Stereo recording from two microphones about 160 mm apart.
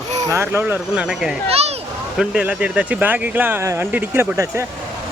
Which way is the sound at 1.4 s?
40° right (ahead or behind).